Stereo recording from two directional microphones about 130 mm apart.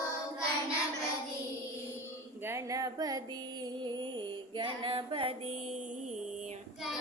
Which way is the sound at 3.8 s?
35° right (ahead or behind).